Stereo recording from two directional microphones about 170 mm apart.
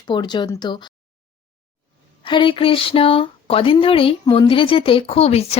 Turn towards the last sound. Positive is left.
turn(degrees=35)  # may be behind; listen again after turning